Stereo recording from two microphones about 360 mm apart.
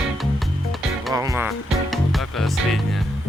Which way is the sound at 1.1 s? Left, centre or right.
Centre.